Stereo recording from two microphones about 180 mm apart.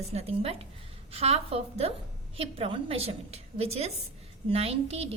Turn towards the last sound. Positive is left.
turn(degrees=-35)  # may be behind; listen again after turning